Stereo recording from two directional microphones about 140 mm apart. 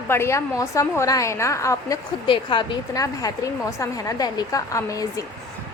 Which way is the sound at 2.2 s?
35° left (ahead or behind).